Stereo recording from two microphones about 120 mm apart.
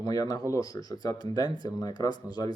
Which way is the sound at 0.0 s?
30° left (ahead or behind).